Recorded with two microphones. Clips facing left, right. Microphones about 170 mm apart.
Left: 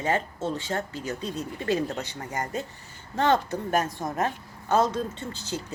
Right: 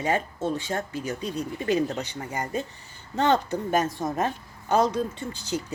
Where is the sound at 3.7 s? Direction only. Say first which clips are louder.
Right 2 dB; 20° right (ahead or behind).